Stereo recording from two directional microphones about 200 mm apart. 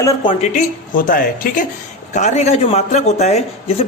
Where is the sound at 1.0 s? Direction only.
45° left (ahead or behind).